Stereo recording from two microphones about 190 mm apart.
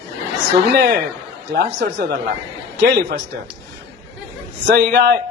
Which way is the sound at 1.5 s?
55° right (ahead or behind).